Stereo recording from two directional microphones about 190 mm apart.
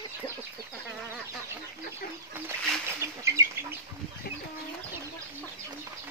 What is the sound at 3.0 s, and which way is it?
Bird, 15° right (ahead or behind).